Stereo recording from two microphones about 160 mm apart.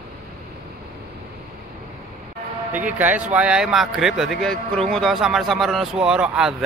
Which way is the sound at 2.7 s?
10° right (ahead or behind).